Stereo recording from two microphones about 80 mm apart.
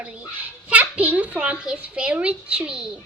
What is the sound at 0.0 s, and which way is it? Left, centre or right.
A child's voice, centre.